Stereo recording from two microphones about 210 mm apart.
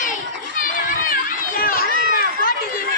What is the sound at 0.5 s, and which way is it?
Children playing, 40° left (ahead or behind).